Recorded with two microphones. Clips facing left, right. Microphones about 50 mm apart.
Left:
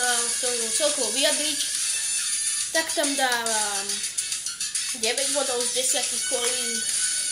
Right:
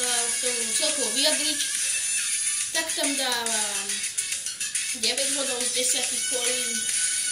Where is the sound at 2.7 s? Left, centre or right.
Left.